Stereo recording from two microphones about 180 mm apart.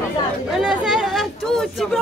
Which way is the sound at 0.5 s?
5° right (ahead or behind).